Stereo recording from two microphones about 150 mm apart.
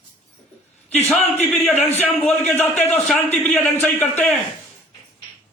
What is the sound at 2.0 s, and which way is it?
A man's voice, 5° left (ahead or behind).